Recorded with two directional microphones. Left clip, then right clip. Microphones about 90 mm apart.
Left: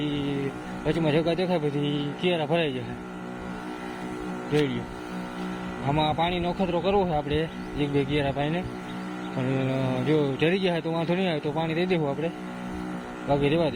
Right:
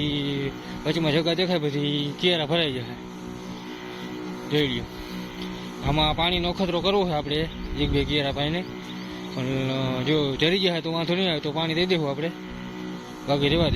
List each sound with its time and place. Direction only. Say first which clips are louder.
0.0 s mantra: right 2 dB; centre (ahead or behind)
0.9 s speech: right 1 dB; centre (ahead or behind)
5.8 s speech: right 2 dB; 5° right (ahead or behind)
9.4 s mantra: even; 10° left (ahead or behind)
10.0 s speech: right 1 dB; centre (ahead or behind)